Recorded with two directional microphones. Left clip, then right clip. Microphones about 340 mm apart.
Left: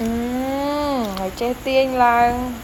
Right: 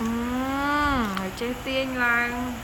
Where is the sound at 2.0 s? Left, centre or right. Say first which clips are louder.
Left 7 dB; left.